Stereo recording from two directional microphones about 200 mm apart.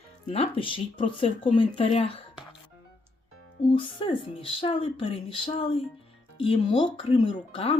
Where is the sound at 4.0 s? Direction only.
25° left (ahead or behind).